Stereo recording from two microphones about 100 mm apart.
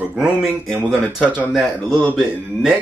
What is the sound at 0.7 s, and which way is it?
Speech, 15° right (ahead or behind).